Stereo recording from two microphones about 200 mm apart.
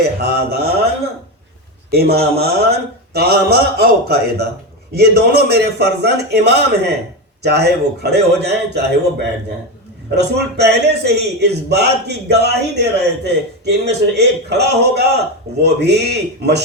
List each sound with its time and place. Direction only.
0.2 s a man's voice: 50° right (ahead or behind)
1.9 s a man's voice: 50° right (ahead or behind)